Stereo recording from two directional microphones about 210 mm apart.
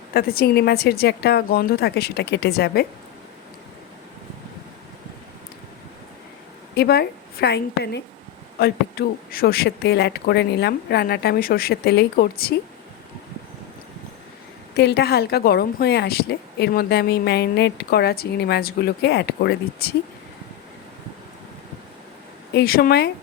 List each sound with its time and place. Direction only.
0.1 s a woman's voice: 45° left (ahead or behind)
6.7 s a woman's voice: 50° left (ahead or behind)
14.8 s a woman's voice: 50° left (ahead or behind)
22.5 s a woman's voice: 45° left (ahead or behind)